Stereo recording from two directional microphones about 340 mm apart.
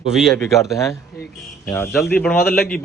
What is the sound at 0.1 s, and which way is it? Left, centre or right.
A man's voice, centre.